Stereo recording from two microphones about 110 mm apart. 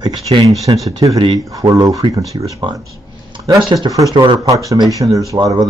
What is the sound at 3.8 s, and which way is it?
Speech, 35° right (ahead or behind).